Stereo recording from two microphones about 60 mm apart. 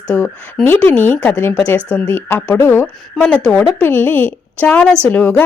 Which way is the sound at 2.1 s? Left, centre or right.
Left.